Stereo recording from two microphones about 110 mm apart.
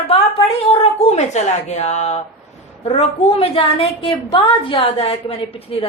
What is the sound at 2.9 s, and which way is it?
A woman's voice, 60° left (ahead or behind).